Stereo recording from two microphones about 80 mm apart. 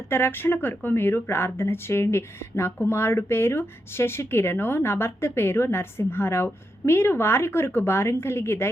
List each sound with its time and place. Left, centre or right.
0.1 s speech: left